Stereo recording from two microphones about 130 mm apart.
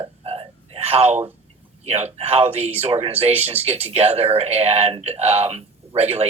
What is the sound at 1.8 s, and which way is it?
Speech, 55° right (ahead or behind).